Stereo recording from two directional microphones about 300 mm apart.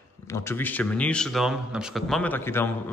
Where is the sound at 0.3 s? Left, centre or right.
Centre.